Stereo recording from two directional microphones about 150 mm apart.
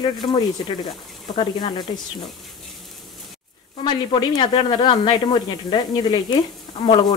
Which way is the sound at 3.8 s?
30° left (ahead or behind).